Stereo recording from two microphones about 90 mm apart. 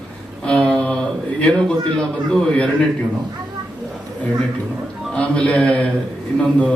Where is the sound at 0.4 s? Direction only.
10° left (ahead or behind).